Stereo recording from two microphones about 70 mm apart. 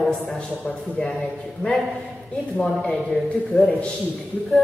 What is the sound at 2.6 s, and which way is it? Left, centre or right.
A man's voice, centre.